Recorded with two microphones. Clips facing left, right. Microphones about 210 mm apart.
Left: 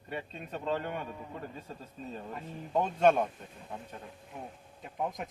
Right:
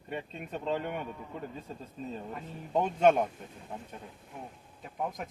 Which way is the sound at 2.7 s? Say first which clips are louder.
Right 1 dB; 15° right (ahead or behind).